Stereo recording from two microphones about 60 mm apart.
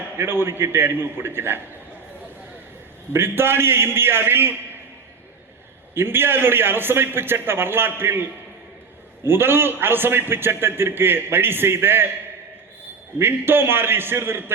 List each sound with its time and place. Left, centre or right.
0.2 s a man's voice: right
3.1 s a man's voice: right
5.9 s a man's voice: right
13.1 s a man's voice: right